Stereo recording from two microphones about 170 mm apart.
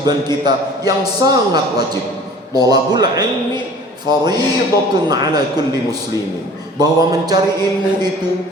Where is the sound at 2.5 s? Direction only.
25° right (ahead or behind).